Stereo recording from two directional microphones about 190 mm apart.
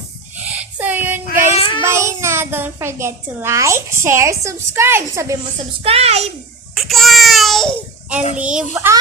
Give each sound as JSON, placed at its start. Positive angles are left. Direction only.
{"t": 0.4, "sound": "child singing", "side_deg": -10}
{"t": 1.5, "sound": "child singing", "side_deg": 25}
{"t": 1.8, "sound": "a child's voice", "side_deg": -15}
{"t": 5.8, "sound": "a child's voice", "side_deg": -30}
{"t": 6.7, "sound": "babbling", "side_deg": 0}
{"t": 8.4, "sound": "a child's voice", "side_deg": -5}